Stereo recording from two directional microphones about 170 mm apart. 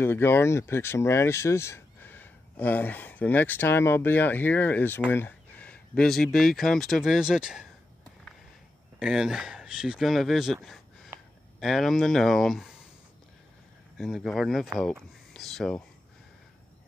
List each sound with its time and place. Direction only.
0.0 s speech: 15° left (ahead or behind); by 7.6 s 5° right (ahead or behind)
9.0 s speech: 5° right (ahead or behind)
13.9 s speech: centre (ahead or behind)